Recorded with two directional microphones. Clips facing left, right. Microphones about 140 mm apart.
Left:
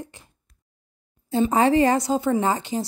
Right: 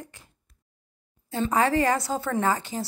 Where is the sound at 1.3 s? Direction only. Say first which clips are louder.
Left 5 dB; 25° left (ahead or behind).